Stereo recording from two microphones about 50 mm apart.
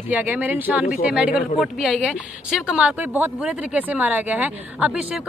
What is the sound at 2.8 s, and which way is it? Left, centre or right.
Speech, right.